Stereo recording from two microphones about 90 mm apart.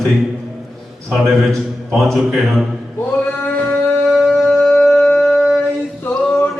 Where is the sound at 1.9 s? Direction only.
5° left (ahead or behind).